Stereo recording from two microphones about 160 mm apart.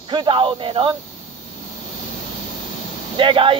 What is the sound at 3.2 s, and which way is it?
Speech, 35° right (ahead or behind).